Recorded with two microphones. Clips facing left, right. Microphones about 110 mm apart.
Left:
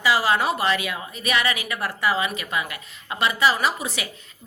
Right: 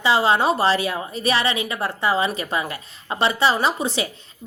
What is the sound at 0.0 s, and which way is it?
A woman's voice, 30° right (ahead or behind).